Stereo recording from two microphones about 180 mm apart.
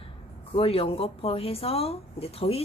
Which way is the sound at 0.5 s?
30° left (ahead or behind).